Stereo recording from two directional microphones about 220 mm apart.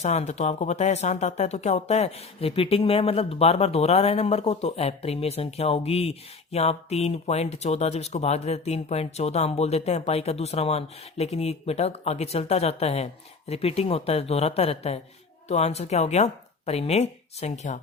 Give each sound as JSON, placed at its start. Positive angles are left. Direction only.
{"t": 0.0, "sound": "speech", "side_deg": 30}